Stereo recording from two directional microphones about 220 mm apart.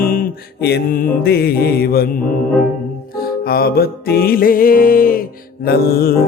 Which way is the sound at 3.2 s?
45° left (ahead or behind).